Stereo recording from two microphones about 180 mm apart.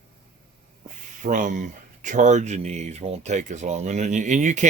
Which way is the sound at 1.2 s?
45° right (ahead or behind).